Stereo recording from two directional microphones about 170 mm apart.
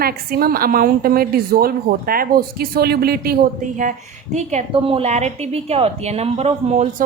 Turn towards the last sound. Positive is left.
turn(degrees=-40)  # may be behind; listen again after turning